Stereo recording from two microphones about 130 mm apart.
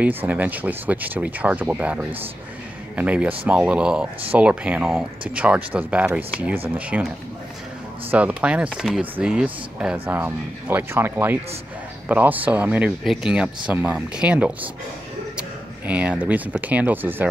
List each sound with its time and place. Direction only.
0.0 s speech: 15° right (ahead or behind)
8.1 s speech: 10° right (ahead or behind)
15.9 s speech: 10° right (ahead or behind)